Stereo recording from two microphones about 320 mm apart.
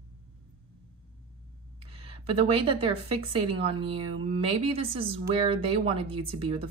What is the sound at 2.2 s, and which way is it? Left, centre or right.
Speech, centre.